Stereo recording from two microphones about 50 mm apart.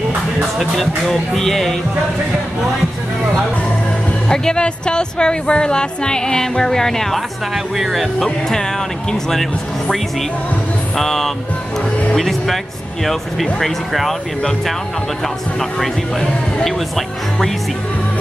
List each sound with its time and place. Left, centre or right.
0.6 s speech: centre
4.3 s speech: centre
7.5 s speech: centre
8.2 s speech: centre
11.0 s speech: centre
16.6 s speech: centre